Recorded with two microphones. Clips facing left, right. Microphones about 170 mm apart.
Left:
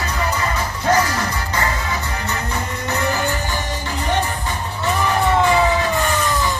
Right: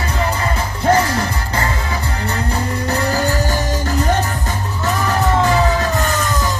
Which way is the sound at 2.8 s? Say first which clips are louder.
Right 2 dB; 35° right (ahead or behind).